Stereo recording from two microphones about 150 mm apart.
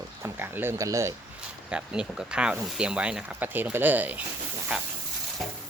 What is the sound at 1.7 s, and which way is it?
Speech, 5° right (ahead or behind).